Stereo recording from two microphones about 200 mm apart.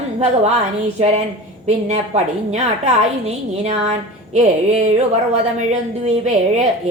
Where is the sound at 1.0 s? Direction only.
35° right (ahead or behind).